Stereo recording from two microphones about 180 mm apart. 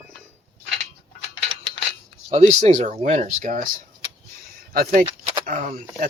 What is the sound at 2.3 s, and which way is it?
Speech, 40° right (ahead or behind).